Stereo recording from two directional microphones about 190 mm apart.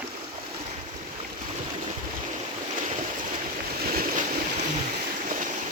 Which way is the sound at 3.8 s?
50° right (ahead or behind).